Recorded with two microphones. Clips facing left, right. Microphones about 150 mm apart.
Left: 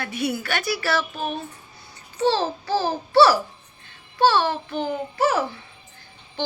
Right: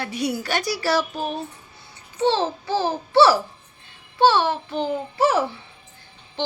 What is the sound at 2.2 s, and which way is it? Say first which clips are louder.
A child's voice: right 1 dB; 20° right (ahead or behind).